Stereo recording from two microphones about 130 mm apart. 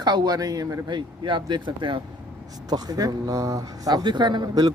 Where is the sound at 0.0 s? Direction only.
35° right (ahead or behind).